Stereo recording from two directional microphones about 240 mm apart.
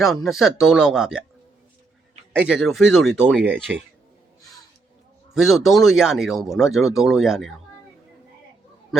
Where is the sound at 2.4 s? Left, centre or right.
Centre.